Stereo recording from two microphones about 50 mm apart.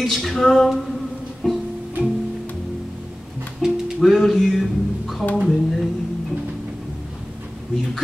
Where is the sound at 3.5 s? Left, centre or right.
Centre.